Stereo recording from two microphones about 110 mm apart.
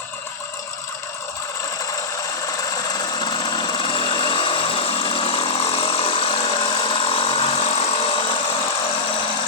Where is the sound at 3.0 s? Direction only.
40° left (ahead or behind).